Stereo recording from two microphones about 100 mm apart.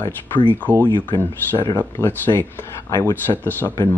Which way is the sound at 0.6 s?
15° left (ahead or behind).